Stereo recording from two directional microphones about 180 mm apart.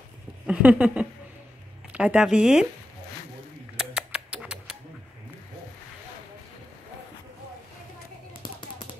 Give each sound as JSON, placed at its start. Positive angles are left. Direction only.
{"t": 0.5, "sound": "speech", "side_deg": -5}
{"t": 3.7, "sound": "rodents", "side_deg": -5}
{"t": 8.4, "sound": "a sound", "side_deg": 25}